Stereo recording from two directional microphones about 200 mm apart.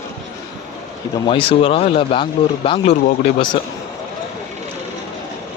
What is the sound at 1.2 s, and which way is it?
Speech, 25° left (ahead or behind).